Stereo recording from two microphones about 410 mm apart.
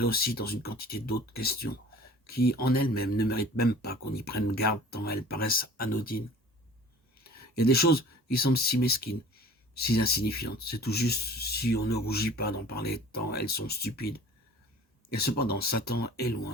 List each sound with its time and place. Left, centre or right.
0.0 s speech: left
7.3 s speech: left